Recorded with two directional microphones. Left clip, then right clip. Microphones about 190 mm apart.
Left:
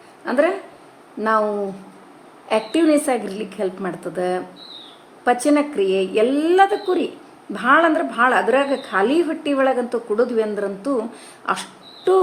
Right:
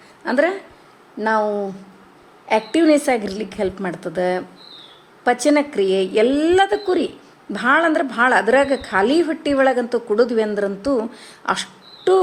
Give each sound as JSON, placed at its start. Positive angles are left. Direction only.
{"t": 0.3, "sound": "speech", "side_deg": -20}
{"t": 1.2, "sound": "speech", "side_deg": -5}
{"t": 2.7, "sound": "a woman's voice", "side_deg": -15}
{"t": 11.4, "sound": "a sound", "side_deg": -15}